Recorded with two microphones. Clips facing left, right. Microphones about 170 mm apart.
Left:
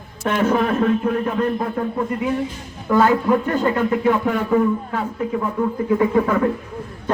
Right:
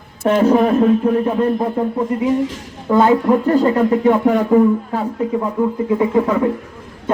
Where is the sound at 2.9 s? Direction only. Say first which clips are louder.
Right 3 dB; 25° right (ahead or behind).